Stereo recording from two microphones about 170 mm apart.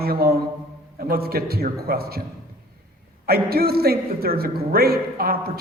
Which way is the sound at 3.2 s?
65° right (ahead or behind).